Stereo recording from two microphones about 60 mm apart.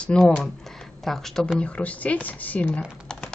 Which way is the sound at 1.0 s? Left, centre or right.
Centre.